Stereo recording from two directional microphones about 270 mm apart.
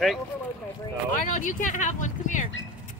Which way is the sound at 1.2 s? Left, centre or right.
Left.